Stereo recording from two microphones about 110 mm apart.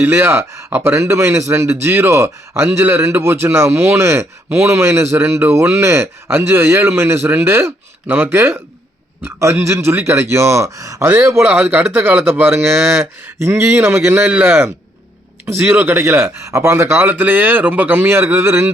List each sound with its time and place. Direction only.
0.0 s a man's voice: 20° right (ahead or behind)
11.1 s a man's voice: 20° right (ahead or behind)